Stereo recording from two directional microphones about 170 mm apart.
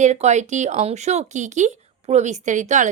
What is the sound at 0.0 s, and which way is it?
A woman's voice, 40° right (ahead or behind).